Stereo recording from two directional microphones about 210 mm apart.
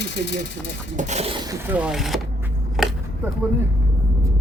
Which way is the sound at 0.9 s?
35° right (ahead or behind).